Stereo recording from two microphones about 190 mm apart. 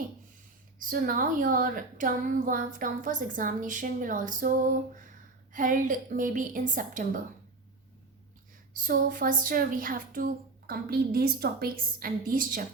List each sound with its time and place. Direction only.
0.8 s a woman's voice: 45° right (ahead or behind)
8.8 s a woman's voice: 45° right (ahead or behind)